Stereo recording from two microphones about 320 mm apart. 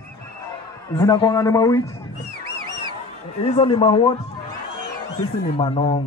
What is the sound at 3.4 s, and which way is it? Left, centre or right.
Speech, centre.